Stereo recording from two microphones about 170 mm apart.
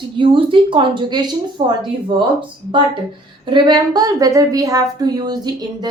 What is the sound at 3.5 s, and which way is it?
A woman's voice, 25° right (ahead or behind).